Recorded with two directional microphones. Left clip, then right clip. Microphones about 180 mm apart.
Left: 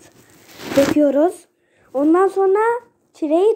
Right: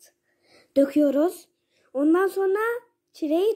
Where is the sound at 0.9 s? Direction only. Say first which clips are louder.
Left 6 dB; 10° right (ahead or behind).